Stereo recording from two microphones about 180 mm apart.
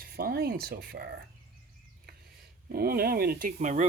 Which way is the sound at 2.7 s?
60° right (ahead or behind).